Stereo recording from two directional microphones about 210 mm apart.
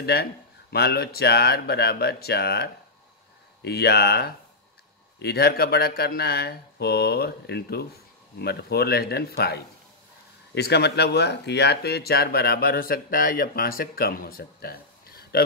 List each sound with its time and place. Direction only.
0.0 s speech: 50° left (ahead or behind)